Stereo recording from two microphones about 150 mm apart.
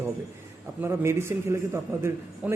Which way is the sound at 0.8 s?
15° right (ahead or behind).